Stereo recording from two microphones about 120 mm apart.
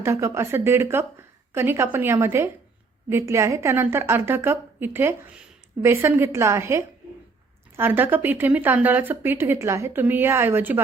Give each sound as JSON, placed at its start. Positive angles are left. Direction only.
{"t": 0.0, "sound": "a woman's voice", "side_deg": -25}